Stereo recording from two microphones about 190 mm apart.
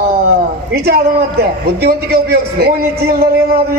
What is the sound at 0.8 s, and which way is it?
A man's voice, 55° right (ahead or behind).